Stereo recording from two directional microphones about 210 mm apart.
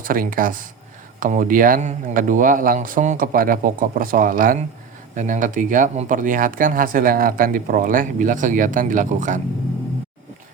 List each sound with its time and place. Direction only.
0.0 s speech: 40° right (ahead or behind)